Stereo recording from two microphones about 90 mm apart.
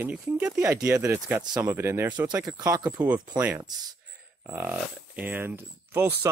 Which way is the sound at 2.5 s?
40° right (ahead or behind).